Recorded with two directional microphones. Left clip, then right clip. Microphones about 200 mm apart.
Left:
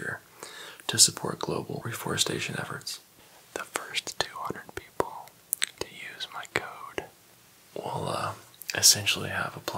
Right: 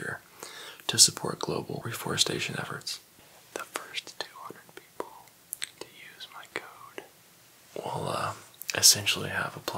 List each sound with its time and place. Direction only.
0.0 s speech: 5° right (ahead or behind)
3.5 s whispering: 15° left (ahead or behind)
3.9 s whispering: 30° left (ahead or behind)
7.7 s whispering: centre (ahead or behind)